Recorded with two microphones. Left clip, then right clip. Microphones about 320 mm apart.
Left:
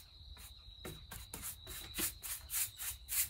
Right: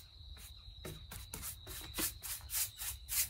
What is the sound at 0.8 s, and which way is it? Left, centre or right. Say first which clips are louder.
Rub: even; centre.